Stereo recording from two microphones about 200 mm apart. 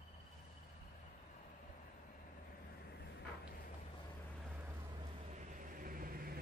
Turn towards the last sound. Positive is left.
turn(degrees=-45)  # may be behind; listen again after turning